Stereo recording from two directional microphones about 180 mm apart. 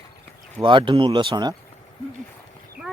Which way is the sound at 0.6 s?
30° right (ahead or behind).